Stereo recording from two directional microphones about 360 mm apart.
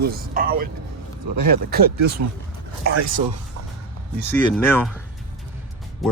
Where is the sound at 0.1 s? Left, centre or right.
Right.